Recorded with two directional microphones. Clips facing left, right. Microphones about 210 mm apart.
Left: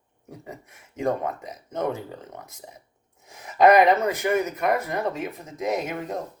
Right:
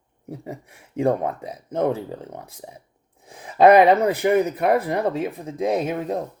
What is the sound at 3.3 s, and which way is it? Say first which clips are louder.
Speech: right 3 dB; 30° right (ahead or behind).